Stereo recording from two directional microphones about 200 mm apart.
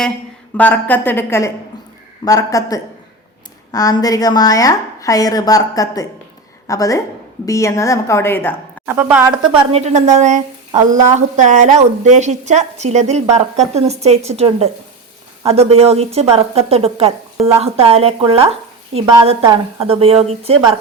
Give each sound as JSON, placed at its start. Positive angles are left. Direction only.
{"t": 0.5, "sound": "a woman's voice", "side_deg": 10}
{"t": 8.9, "sound": "a woman's voice", "side_deg": -10}
{"t": 9.5, "sound": "a woman's voice", "side_deg": -30}